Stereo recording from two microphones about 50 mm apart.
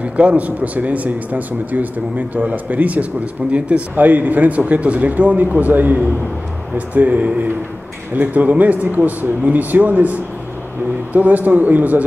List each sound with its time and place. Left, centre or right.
0.0 s speech: right